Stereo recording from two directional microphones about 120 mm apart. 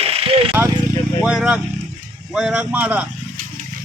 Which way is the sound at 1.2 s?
5° right (ahead or behind).